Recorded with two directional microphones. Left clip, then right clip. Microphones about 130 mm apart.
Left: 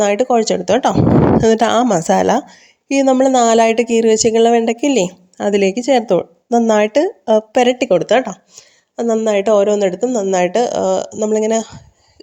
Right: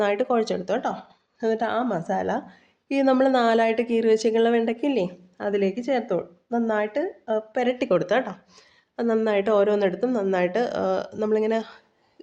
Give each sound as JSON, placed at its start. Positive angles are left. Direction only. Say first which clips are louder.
{"t": 0.0, "sound": "speech", "louder": "left 9 dB", "side_deg": 55}
{"t": 2.9, "sound": "speech", "louder": "left 8 dB", "side_deg": 50}
{"t": 7.8, "sound": "speech", "louder": "left 9 dB", "side_deg": 45}
{"t": 9.2, "sound": "speech", "louder": "left 8 dB", "side_deg": 45}